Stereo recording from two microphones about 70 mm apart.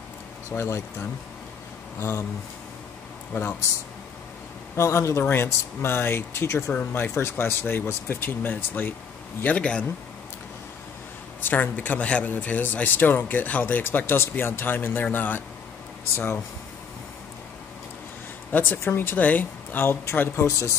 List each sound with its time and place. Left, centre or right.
0.5 s speech: left
4.7 s speech: left
6.7 s speech: left
11.6 s speech: left
18.5 s speech: left